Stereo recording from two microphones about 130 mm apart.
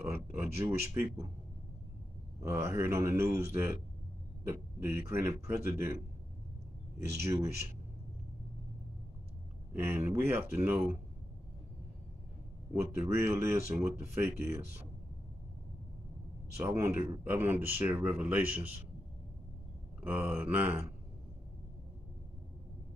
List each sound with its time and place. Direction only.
0.0 s speech: 20° right (ahead or behind)
2.4 s speech: 20° right (ahead or behind)
7.2 s speech: 20° right (ahead or behind)
9.8 s speech: 20° right (ahead or behind)
12.7 s speech: 20° right (ahead or behind)
16.6 s speech: 20° right (ahead or behind)
20.0 s speech: 15° right (ahead or behind)